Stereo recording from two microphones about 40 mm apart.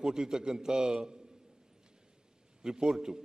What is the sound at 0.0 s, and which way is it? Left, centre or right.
A man's voice, centre.